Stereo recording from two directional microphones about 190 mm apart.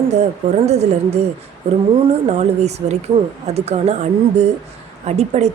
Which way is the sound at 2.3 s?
35° right (ahead or behind).